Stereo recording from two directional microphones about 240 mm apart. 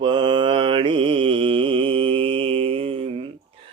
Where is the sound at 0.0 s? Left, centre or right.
Centre.